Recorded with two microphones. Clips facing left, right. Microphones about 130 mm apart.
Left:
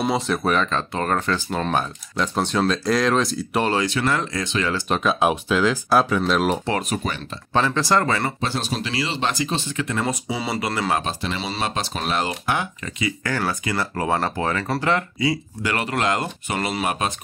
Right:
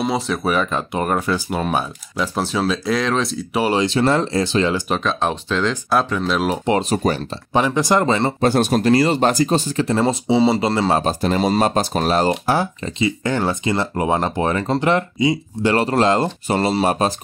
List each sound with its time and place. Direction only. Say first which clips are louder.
0.0 s speech: right 1 dB; centre (ahead or behind)
3.7 s speech: right 5 dB; 25° right (ahead or behind)
4.8 s speech: left 1 dB; centre (ahead or behind)
6.6 s speech: right 6 dB; 20° right (ahead or behind)
6.9 s speech: right 7 dB; 35° right (ahead or behind)
7.5 s speech: right 3 dB; 15° right (ahead or behind)
8.4 s speech: right 10 dB; 50° right (ahead or behind); by 15.7 s 20° right (ahead or behind)
15.7 s speech: right 6 dB; 30° right (ahead or behind)